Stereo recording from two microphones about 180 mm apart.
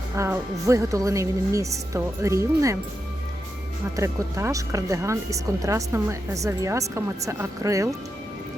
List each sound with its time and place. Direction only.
0.2 s speech: 15° right (ahead or behind)
3.9 s speech: 15° right (ahead or behind)